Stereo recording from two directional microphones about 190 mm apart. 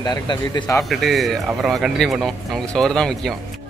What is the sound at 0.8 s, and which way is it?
A man's voice, centre (ahead or behind).